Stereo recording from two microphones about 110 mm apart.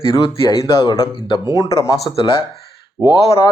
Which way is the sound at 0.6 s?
30° left (ahead or behind).